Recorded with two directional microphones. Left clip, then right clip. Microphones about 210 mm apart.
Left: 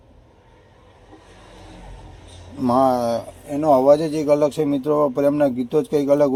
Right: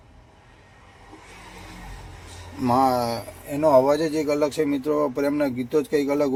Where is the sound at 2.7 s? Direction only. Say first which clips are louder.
Left 3 dB; 5° left (ahead or behind).